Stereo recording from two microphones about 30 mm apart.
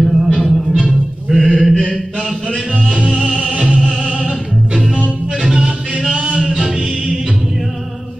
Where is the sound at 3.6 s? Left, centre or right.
Right.